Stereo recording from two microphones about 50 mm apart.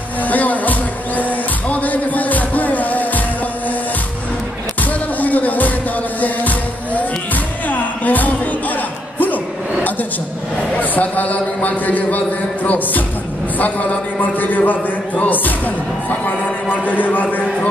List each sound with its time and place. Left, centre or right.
0.3 s music: left
4.8 s music: left
10.8 s a man's voice: left
12.6 s music: left